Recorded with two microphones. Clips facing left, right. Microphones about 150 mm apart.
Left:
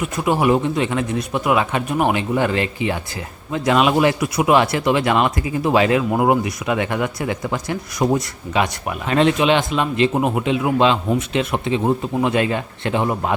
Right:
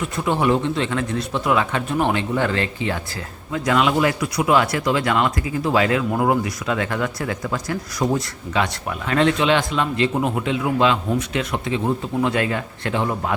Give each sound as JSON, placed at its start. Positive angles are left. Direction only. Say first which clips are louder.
{"t": 0.0, "sound": "a man's voice", "louder": "left 2 dB", "side_deg": 15}